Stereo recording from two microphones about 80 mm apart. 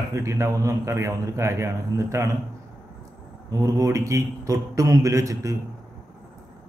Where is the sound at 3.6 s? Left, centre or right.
Right.